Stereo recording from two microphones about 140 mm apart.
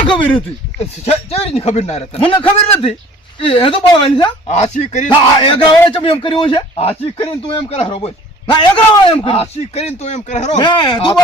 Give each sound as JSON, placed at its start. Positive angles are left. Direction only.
{"t": 0.0, "sound": "speech", "side_deg": 35}
{"t": 1.0, "sound": "a man's voice", "side_deg": 45}
{"t": 4.4, "sound": "speech", "side_deg": 55}
{"t": 5.0, "sound": "a man's voice", "side_deg": 35}
{"t": 10.6, "sound": "a man's voice", "side_deg": 35}